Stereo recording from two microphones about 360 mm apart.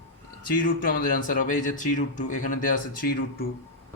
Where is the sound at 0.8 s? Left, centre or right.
Left.